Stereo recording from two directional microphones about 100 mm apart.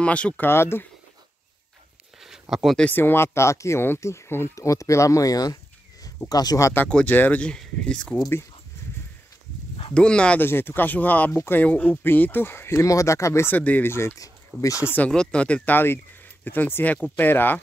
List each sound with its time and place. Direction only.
0.0 s speech: 10° left (ahead or behind)
2.1 s a sound: 5° right (ahead or behind)
2.5 s speech: centre (ahead or behind)
2.8 s speech: 20° left (ahead or behind); by 6.7 s 40° left (ahead or behind)
6.9 s speech: 15° left (ahead or behind)
9.9 s speech: 10° left (ahead or behind)
10.4 s speech: 20° left (ahead or behind)
15.0 s speech: 10° left (ahead or behind)